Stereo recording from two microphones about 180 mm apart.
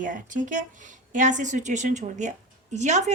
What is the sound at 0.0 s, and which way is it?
A woman's voice, 45° right (ahead or behind).